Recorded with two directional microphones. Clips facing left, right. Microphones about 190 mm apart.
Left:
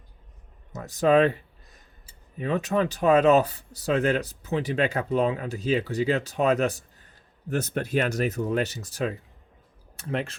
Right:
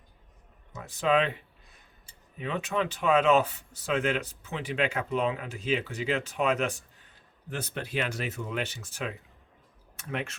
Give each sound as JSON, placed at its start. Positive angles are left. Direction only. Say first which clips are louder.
{"t": 0.7, "sound": "speech", "louder": "left 6 dB", "side_deg": 40}
{"t": 2.4, "sound": "speech", "louder": "left 5 dB", "side_deg": 40}